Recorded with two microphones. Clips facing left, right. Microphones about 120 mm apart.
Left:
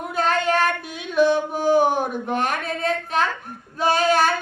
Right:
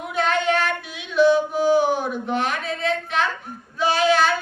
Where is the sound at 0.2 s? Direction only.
40° left (ahead or behind).